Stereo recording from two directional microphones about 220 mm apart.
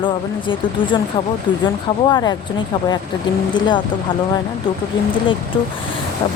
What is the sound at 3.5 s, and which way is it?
Speech, 20° left (ahead or behind).